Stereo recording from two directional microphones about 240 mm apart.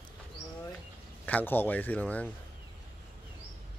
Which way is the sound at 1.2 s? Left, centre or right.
Centre.